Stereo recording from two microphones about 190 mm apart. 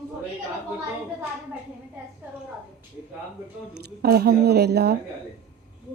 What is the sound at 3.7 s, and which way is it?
Speech, 55° right (ahead or behind).